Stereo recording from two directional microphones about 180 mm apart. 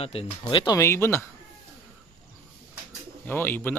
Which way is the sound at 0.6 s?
15° left (ahead or behind).